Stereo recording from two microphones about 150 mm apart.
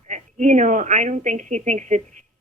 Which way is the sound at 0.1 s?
55° right (ahead or behind).